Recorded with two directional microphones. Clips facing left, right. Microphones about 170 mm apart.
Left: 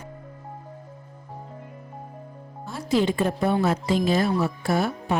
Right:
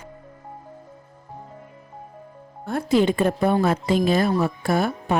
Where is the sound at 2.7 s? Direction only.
55° right (ahead or behind).